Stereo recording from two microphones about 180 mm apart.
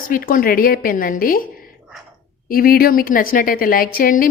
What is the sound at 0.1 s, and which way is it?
A woman's voice, 50° left (ahead or behind).